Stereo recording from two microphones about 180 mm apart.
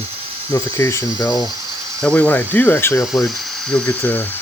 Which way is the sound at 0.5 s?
15° left (ahead or behind).